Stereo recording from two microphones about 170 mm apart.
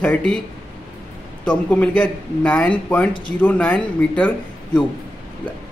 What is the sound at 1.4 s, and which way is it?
Speech, 5° left (ahead or behind).